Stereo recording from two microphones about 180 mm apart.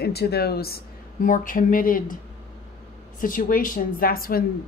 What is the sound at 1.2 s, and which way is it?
Speech, 45° left (ahead or behind).